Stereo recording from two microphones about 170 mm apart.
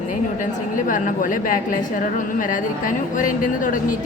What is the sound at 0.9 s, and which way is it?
A woman's voice, 50° left (ahead or behind).